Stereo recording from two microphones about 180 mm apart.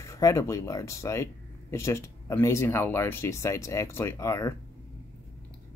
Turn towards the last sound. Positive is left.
turn(degrees=15)  # may be behind; listen again after turning